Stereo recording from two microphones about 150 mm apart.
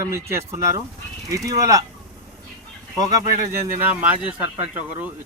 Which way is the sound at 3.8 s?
10° right (ahead or behind).